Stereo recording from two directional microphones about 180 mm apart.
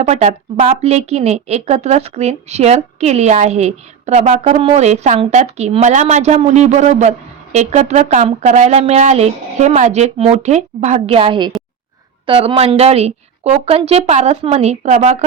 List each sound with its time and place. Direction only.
0.0 s speech: 40° right (ahead or behind)